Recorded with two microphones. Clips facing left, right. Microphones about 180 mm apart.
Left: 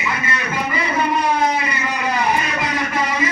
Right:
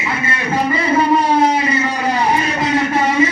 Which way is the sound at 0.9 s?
30° right (ahead or behind).